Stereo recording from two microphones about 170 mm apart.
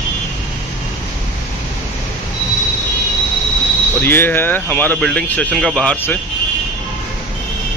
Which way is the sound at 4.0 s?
10° left (ahead or behind).